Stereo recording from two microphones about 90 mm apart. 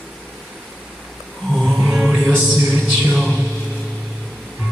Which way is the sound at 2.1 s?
10° left (ahead or behind).